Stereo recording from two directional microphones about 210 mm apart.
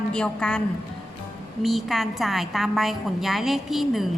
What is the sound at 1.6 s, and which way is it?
A woman's voice, centre (ahead or behind).